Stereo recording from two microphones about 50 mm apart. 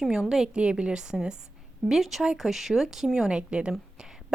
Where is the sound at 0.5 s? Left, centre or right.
Centre.